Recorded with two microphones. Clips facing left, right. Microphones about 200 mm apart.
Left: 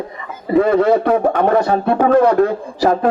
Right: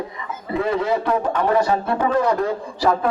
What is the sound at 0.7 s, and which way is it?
A man's voice, 60° left (ahead or behind).